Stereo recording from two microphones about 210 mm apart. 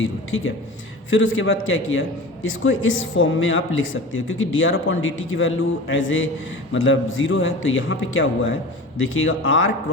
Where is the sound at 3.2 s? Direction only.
65° left (ahead or behind).